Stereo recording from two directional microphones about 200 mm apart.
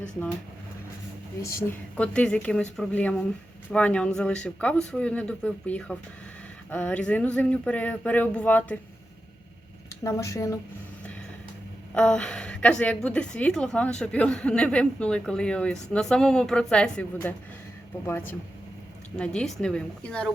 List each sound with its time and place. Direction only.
1.5 s a woman's voice: 10° left (ahead or behind)
10.0 s speech: 15° left (ahead or behind)
11.9 s a woman's voice: 5° left (ahead or behind)